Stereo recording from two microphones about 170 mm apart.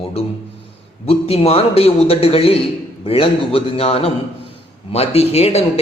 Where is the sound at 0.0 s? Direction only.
35° left (ahead or behind).